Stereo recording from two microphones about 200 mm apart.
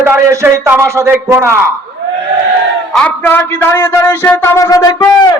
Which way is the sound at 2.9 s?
10° left (ahead or behind).